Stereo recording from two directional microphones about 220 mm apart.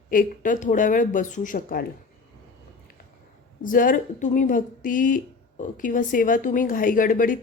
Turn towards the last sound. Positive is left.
turn(degrees=40)  # may be behind; listen again after turning